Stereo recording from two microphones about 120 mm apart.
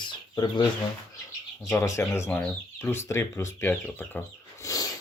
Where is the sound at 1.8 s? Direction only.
25° left (ahead or behind).